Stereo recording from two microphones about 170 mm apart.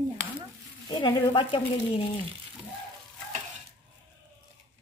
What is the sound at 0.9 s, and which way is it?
A woman's voice, 25° left (ahead or behind).